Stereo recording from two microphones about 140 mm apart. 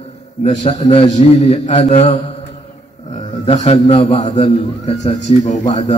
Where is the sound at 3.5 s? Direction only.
50° left (ahead or behind).